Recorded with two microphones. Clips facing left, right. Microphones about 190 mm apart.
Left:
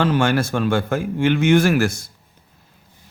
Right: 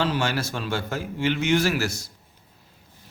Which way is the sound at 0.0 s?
55° left (ahead or behind).